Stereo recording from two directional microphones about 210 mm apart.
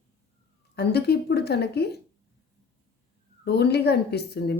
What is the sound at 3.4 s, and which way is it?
Speech, 50° left (ahead or behind).